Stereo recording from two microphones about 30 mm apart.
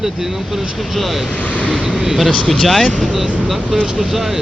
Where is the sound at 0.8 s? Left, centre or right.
Centre.